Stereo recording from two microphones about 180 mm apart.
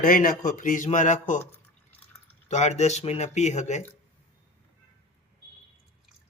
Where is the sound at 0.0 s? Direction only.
50° left (ahead or behind).